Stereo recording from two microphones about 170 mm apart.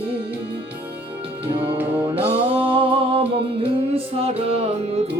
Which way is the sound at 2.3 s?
30° right (ahead or behind).